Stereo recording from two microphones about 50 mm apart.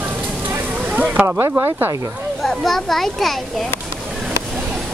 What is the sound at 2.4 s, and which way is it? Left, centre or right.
Speech, centre.